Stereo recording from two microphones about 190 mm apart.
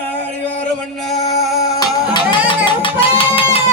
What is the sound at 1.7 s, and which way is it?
Music, 20° left (ahead or behind).